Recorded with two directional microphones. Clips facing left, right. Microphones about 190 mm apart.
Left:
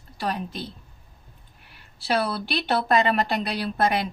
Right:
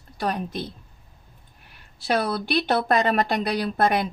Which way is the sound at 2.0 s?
50° right (ahead or behind).